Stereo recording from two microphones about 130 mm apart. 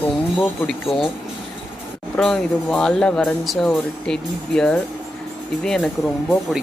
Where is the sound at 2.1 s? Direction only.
5° left (ahead or behind).